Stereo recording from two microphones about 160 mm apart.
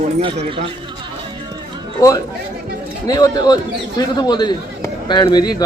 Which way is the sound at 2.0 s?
20° left (ahead or behind).